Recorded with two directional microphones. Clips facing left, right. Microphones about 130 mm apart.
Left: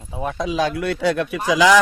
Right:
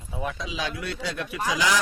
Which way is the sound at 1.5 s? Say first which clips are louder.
Left 10 dB; 80° left.